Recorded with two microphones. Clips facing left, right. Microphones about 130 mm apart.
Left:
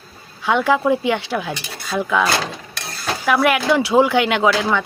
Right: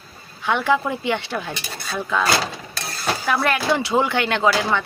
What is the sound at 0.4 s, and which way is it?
Speech, 15° left (ahead or behind).